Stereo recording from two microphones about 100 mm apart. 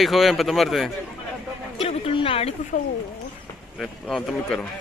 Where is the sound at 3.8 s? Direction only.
5° left (ahead or behind).